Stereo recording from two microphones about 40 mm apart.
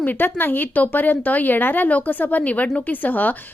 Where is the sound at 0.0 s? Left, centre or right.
Left.